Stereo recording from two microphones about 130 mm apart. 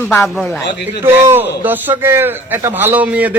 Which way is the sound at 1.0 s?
15° right (ahead or behind).